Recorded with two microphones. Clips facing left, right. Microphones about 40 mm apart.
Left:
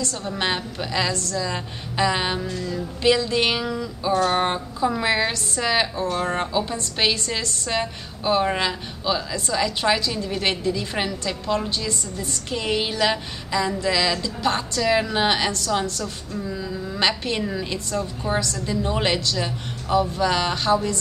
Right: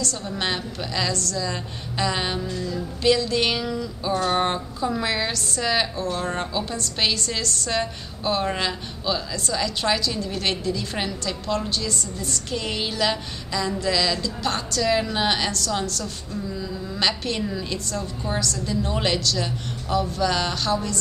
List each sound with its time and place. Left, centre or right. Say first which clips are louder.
0.0 s a woman's voice: left 2 dB; left